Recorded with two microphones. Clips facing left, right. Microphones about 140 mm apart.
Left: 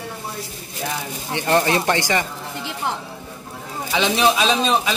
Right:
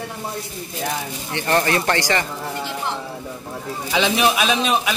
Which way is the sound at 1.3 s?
15° left (ahead or behind).